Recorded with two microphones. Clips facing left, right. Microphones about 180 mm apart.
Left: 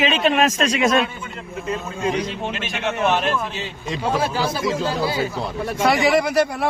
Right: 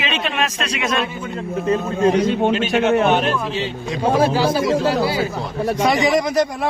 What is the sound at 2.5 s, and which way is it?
A man's voice, 40° right (ahead or behind).